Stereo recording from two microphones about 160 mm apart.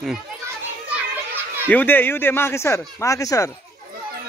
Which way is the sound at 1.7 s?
10° left (ahead or behind).